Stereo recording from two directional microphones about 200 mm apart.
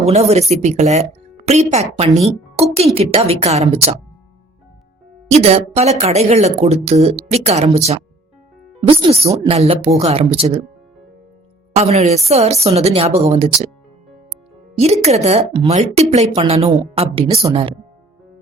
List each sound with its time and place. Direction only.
0.0 s a woman's voice: 30° right (ahead or behind)
5.3 s a woman's voice: 30° right (ahead or behind)
9.6 s speech: 30° right (ahead or behind)
11.7 s a woman's voice: 30° right (ahead or behind)
15.0 s a woman's voice: 30° right (ahead or behind)